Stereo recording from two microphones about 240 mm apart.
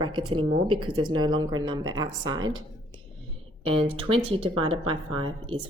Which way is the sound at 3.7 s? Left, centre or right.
Right.